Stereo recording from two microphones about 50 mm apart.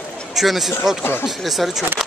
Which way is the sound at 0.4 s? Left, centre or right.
Centre.